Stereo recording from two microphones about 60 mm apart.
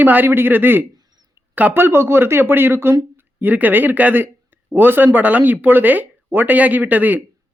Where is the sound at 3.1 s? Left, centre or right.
Right.